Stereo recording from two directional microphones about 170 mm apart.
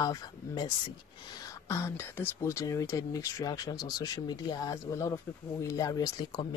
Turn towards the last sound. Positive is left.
turn(degrees=20)  # may be behind; listen again after turning